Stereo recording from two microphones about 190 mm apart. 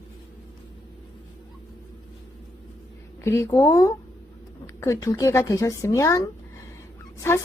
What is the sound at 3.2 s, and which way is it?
Speech, 20° left (ahead or behind).